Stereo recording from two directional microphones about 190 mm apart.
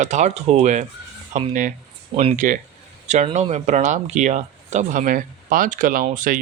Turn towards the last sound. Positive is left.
turn(degrees=-45)  # may be behind; listen again after turning